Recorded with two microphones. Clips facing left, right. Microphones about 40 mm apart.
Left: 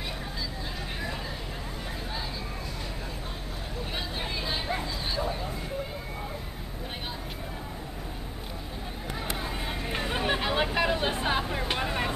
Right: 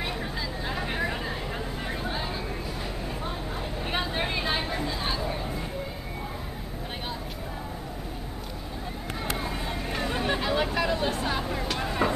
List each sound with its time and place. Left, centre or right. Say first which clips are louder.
0.7 s vehicle: right 8 dB; right
4.0 s vehicle: right 5 dB; right
9.7 s a sound: even; centre
11.5 s vehicle: even; left